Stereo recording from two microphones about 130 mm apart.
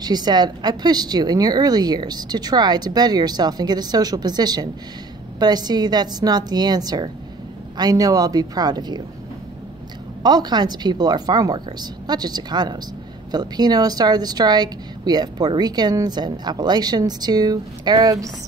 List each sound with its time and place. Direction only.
0.0 s a woman's voice: 30° right (ahead or behind)
10.2 s speech: 30° right (ahead or behind)